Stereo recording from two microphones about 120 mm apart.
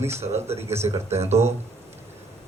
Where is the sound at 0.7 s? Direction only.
60° right (ahead or behind).